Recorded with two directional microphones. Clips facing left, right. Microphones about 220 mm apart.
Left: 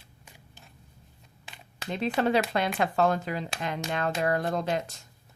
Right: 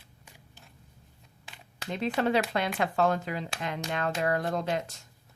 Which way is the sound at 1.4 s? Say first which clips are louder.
Left 1 dB; 20° left (ahead or behind).